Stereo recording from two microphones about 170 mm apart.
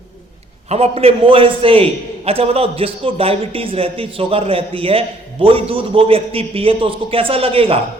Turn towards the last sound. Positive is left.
turn(degrees=-35)  # may be behind; listen again after turning